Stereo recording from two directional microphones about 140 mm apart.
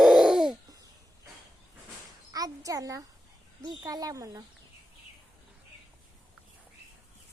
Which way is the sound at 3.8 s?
25° right (ahead or behind).